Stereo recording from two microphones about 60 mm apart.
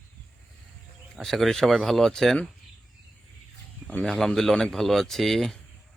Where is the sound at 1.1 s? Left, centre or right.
Centre.